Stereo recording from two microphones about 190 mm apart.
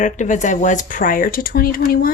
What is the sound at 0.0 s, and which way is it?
A woman's voice, 40° left (ahead or behind).